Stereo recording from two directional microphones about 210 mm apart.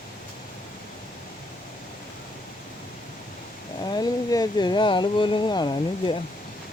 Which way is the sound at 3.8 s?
20° left (ahead or behind).